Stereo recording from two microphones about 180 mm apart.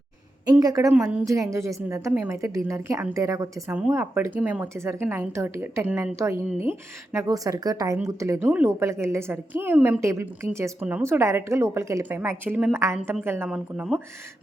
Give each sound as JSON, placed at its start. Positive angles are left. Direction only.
{"t": 0.4, "sound": "a woman's voice", "side_deg": -20}
{"t": 0.9, "sound": "a woman's voice", "side_deg": -5}
{"t": 1.2, "sound": "a woman's voice", "side_deg": -20}